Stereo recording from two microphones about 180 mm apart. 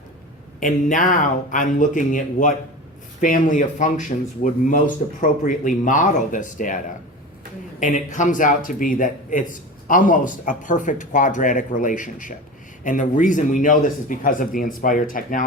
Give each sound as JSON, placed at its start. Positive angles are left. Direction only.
{"t": 0.6, "sound": "speech", "side_deg": 45}
{"t": 5.2, "sound": "speech", "side_deg": 45}